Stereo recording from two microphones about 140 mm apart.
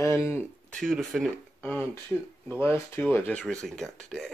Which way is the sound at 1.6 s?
15° left (ahead or behind).